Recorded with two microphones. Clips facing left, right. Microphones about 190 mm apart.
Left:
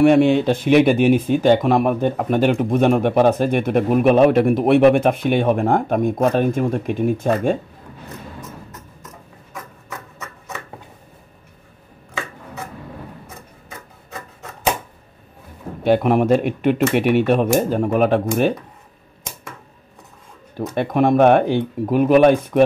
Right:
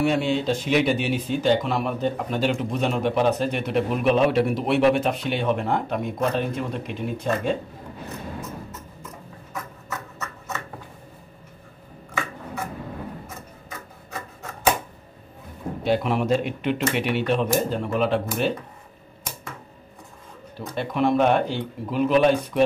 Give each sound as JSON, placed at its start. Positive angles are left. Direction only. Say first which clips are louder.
{"t": 0.0, "sound": "speech", "louder": "left 9 dB", "side_deg": 60}
{"t": 15.8, "sound": "speech", "louder": "left 7 dB", "side_deg": 55}
{"t": 20.5, "sound": "speech", "louder": "left 7 dB", "side_deg": 55}